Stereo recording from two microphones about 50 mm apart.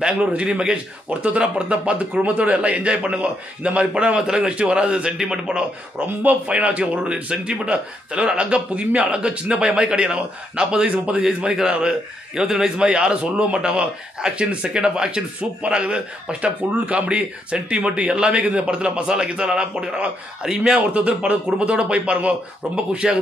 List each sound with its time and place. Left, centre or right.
0.0 s a man's voice: right
23.0 s a man's voice: centre